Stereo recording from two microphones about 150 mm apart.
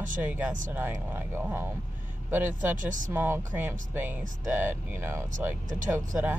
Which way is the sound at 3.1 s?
15° right (ahead or behind).